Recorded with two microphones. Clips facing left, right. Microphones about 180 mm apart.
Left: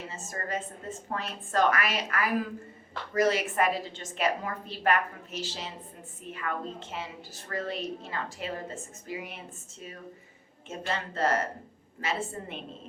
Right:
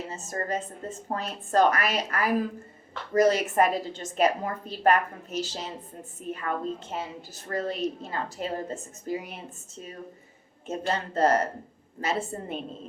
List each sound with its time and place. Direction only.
0.1 s a woman's voice: 40° right (ahead or behind)
10.7 s a woman's voice: 40° right (ahead or behind)